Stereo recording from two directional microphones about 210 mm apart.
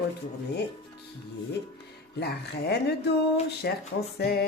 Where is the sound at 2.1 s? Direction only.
50° left (ahead or behind).